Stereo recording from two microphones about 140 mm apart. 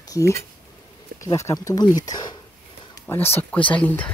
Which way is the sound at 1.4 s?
20° left (ahead or behind).